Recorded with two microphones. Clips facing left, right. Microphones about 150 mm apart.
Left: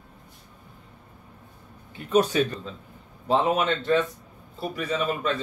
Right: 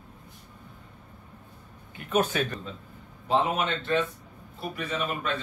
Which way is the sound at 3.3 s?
40° left (ahead or behind).